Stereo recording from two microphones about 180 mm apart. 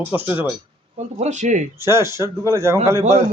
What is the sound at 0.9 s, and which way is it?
Speech, 40° right (ahead or behind).